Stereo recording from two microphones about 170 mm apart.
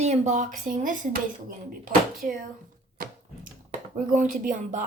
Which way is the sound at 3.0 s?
55° right (ahead or behind).